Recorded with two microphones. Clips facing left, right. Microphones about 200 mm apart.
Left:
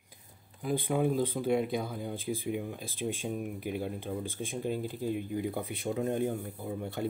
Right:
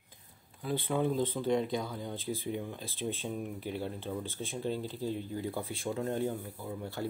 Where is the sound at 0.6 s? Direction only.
15° left (ahead or behind).